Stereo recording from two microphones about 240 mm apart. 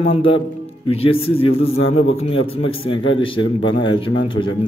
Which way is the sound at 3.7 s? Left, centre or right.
Left.